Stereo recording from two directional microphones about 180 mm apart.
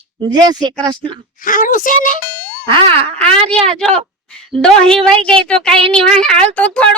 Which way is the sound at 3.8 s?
Centre (ahead or behind).